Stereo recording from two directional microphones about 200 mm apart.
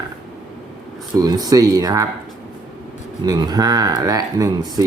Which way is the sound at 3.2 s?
20° right (ahead or behind).